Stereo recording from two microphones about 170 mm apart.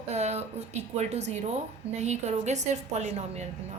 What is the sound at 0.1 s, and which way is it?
A woman's voice, 40° right (ahead or behind).